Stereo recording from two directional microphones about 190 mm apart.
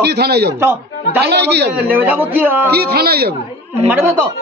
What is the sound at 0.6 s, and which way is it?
Speech, 10° right (ahead or behind).